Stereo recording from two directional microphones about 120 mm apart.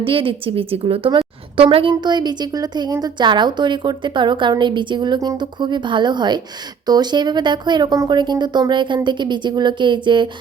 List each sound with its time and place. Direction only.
0.0 s a woman's voice: 50° right (ahead or behind)